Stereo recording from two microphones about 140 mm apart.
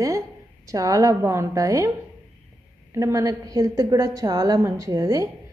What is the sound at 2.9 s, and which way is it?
Speech, 25° right (ahead or behind).